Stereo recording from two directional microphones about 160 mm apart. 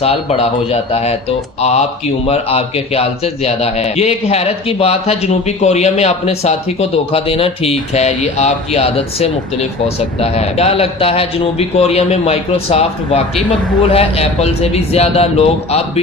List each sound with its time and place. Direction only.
0.0 s speech: 40° left (ahead or behind)